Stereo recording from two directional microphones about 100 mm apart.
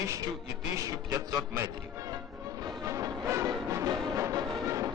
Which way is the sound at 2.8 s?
30° right (ahead or behind).